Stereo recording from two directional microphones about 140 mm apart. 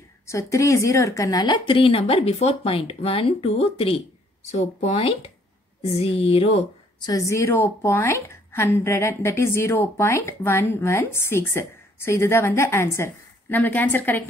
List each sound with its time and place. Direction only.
0.3 s a woman's voice: 20° left (ahead or behind); by 6.6 s 45° left (ahead or behind)
7.0 s a woman's voice: 25° left (ahead or behind)